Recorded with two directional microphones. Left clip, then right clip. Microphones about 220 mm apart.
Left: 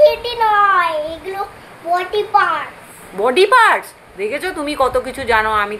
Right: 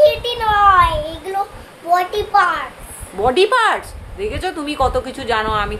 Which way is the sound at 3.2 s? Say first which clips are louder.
Left 3 dB; centre (ahead or behind).